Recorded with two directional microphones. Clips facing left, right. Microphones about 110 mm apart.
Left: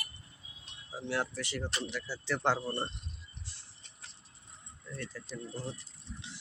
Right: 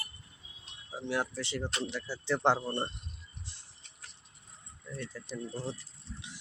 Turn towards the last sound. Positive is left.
turn(degrees=-20)  # may be behind; listen again after turning